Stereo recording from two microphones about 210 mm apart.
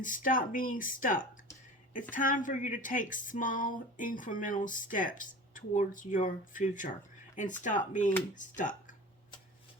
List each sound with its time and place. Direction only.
0.0 s speech: 40° left (ahead or behind)